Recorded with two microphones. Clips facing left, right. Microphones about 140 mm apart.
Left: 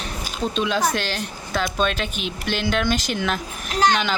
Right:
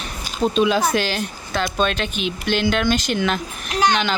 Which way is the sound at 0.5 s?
5° right (ahead or behind).